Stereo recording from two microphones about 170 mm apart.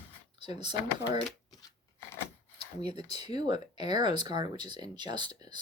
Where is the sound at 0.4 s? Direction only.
25° right (ahead or behind).